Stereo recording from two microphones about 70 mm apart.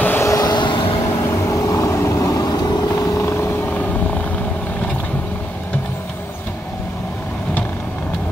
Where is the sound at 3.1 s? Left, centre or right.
Left.